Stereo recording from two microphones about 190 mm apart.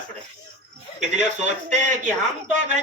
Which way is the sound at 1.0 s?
40° right (ahead or behind).